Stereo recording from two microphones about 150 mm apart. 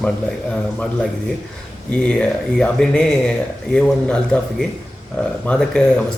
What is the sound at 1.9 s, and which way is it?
A man's voice, 5° left (ahead or behind).